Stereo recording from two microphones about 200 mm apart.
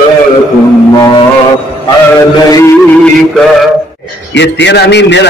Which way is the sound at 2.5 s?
15° left (ahead or behind).